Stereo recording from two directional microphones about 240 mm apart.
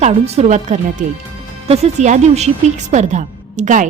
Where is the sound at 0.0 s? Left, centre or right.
Right.